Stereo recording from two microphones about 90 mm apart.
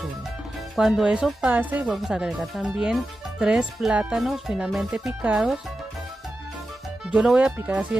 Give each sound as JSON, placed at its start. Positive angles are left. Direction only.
{"t": 0.7, "sound": "speech", "side_deg": -5}
{"t": 2.0, "sound": "speech", "side_deg": -5}
{"t": 4.2, "sound": "speech", "side_deg": 0}
{"t": 7.1, "sound": "speech", "side_deg": -10}